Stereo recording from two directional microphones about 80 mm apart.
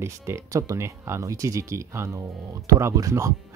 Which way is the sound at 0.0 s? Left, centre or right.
Right.